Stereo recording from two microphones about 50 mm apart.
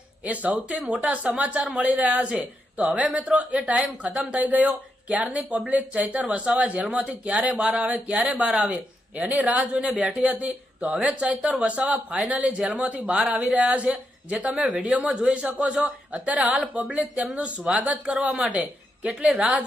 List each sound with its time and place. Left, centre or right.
0.4 s speech: right
6.2 s speech: centre
7.5 s speech: centre
7.8 s speech: right
9.1 s speech: right
9.6 s speech: centre
10.0 s speech: right
18.5 s a woman's voice: right
19.3 s speech: centre